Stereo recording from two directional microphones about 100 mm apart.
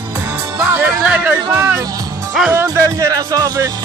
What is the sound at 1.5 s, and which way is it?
Speech, 30° right (ahead or behind).